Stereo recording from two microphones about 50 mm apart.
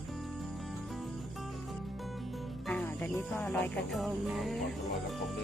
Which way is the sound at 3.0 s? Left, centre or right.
Left.